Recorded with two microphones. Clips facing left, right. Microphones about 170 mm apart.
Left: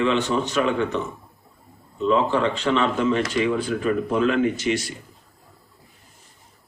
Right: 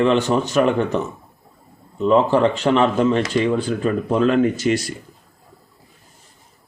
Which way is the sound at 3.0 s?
35° right (ahead or behind).